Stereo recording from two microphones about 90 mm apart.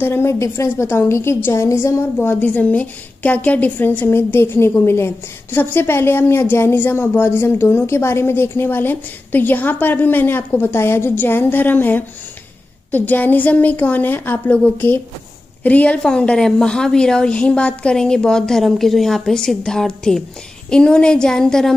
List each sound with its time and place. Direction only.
0.0 s a woman's voice: 25° left (ahead or behind)
2.1 s a woman's voice: 20° left (ahead or behind)